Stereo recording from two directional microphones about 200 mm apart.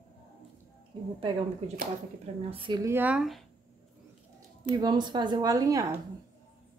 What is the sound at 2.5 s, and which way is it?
Speech, 25° right (ahead or behind).